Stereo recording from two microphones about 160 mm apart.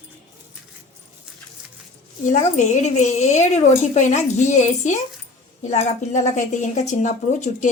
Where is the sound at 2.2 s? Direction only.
50° left (ahead or behind).